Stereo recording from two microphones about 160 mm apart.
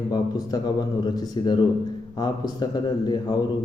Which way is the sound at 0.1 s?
25° left (ahead or behind).